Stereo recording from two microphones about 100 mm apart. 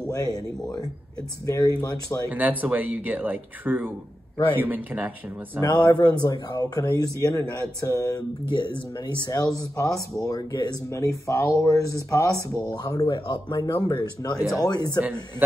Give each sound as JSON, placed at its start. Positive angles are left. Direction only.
{"t": 0.1, "sound": "speech", "side_deg": 35}
{"t": 2.2, "sound": "speech", "side_deg": -15}
{"t": 5.9, "sound": "speech", "side_deg": 45}
{"t": 8.5, "sound": "speech", "side_deg": 50}
{"t": 13.9, "sound": "speech", "side_deg": 45}
{"t": 15.0, "sound": "speech", "side_deg": -20}